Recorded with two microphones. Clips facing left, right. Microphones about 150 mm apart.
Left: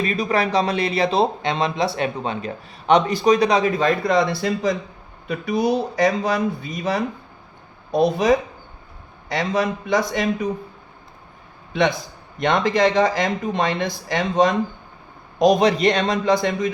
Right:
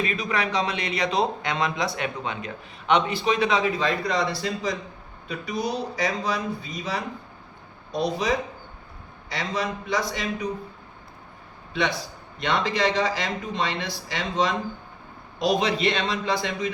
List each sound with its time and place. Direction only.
0.0 s a man's voice: 35° left (ahead or behind); by 8.3 s 55° left (ahead or behind)
9.3 s speech: 50° left (ahead or behind)
11.7 s a man's voice: 50° left (ahead or behind)